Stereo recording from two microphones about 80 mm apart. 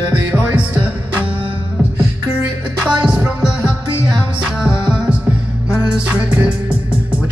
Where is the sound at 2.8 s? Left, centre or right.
Centre.